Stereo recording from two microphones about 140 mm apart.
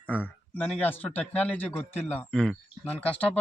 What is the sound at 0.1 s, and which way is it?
Speech, 10° left (ahead or behind).